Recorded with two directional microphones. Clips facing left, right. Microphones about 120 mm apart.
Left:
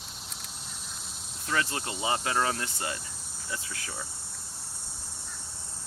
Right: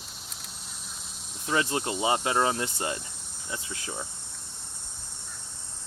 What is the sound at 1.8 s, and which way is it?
Speech, 40° right (ahead or behind).